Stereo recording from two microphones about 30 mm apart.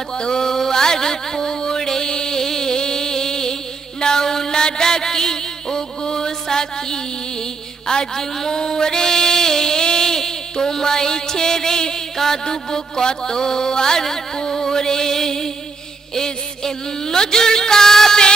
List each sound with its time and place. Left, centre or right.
0.2 s a sound: centre
4.0 s mantra: centre
8.5 s music: left
12.2 s mantra: centre
14.0 s music: centre
16.2 s a sound: centre